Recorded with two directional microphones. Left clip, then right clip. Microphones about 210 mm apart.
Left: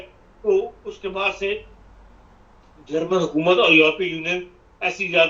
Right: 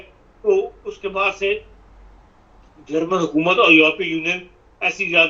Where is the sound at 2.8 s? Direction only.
20° right (ahead or behind).